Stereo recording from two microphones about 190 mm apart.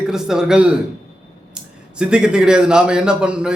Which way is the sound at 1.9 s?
5° right (ahead or behind).